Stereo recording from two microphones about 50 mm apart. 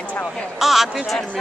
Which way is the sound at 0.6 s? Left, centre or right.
Centre.